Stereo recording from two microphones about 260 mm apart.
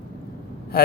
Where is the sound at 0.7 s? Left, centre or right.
Left.